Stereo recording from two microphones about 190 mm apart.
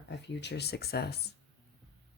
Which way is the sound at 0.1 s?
65° left (ahead or behind).